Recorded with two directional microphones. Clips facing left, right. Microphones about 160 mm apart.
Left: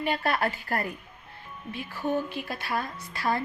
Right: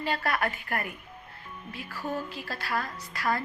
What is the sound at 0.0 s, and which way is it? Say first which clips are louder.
Speech: left 2 dB; 25° left (ahead or behind).